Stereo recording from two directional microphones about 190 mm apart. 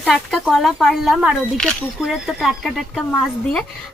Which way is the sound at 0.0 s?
Centre (ahead or behind).